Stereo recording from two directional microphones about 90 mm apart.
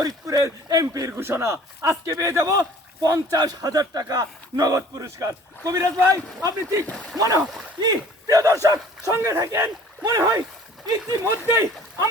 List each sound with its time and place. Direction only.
0.0 s speech: 40° right (ahead or behind)
6.8 s speech: 10° left (ahead or behind)
7.2 s speech: 40° right (ahead or behind)
11.2 s speech: 30° right (ahead or behind)